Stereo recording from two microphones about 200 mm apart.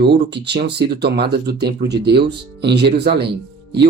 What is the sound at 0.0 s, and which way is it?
Speech, 55° right (ahead or behind).